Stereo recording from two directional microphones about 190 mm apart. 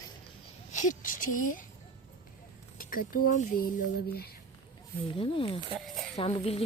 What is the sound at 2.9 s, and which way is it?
Speech, 50° left (ahead or behind).